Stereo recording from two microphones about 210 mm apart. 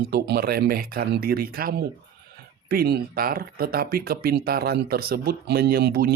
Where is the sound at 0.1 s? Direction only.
50° right (ahead or behind).